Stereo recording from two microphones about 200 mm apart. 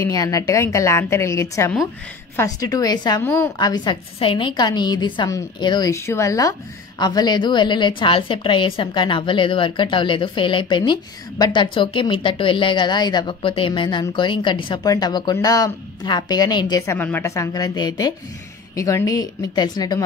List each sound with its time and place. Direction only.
0.0 s a woman's voice: 15° left (ahead or behind)